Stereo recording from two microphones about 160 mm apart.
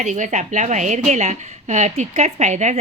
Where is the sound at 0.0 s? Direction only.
50° right (ahead or behind).